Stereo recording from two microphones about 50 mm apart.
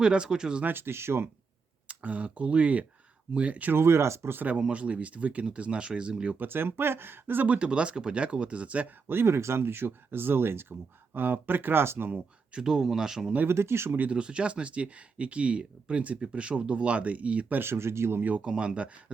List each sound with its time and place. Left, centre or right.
0.0 s speech: centre
0.6 s speech: right
1.9 s speech: right
3.7 s speech: right
4.7 s speech: right
6.3 s speech: right
7.4 s speech: right
9.0 s speech: right
12.5 s speech: centre
13.5 s speech: right
14.1 s speech: right
17.6 s speech: right
18.2 s speech: right
18.4 s speech: centre